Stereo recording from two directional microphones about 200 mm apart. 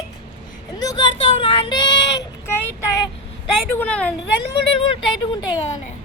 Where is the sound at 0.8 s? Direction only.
20° left (ahead or behind).